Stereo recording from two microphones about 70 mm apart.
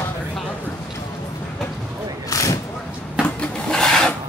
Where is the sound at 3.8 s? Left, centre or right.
Centre.